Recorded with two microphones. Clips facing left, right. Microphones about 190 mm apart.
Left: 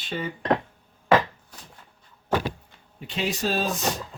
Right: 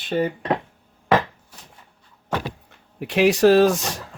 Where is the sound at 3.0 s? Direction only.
70° right (ahead or behind).